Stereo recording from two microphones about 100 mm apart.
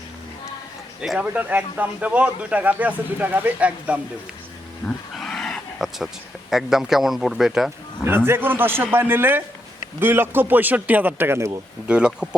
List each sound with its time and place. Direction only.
1.2 s speech: 15° right (ahead or behind)
5.1 s a sound: 5° left (ahead or behind)
6.5 s a man's voice: 5° right (ahead or behind)
8.0 s speech: 25° right (ahead or behind)
11.9 s speech: 10° right (ahead or behind)